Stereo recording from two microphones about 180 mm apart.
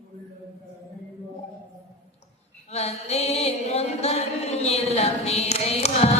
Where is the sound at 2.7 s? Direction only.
35° left (ahead or behind).